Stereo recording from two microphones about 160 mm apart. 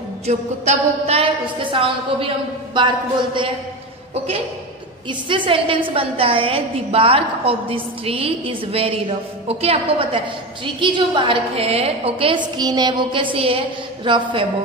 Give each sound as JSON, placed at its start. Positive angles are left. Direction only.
{"t": 0.3, "sound": "a woman's voice", "side_deg": -40}
{"t": 5.3, "sound": "a woman's voice", "side_deg": -30}